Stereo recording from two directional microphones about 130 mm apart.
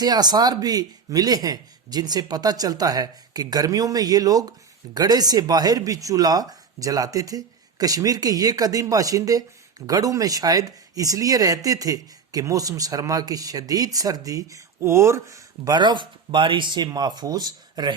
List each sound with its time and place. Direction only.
0.0 s speech: 30° right (ahead or behind)